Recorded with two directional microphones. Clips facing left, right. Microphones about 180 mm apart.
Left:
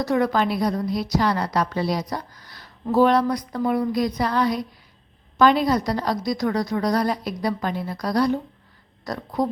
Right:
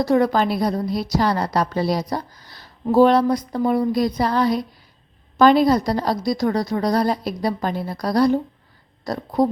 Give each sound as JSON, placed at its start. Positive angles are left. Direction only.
{"t": 0.0, "sound": "a woman's voice", "side_deg": -30}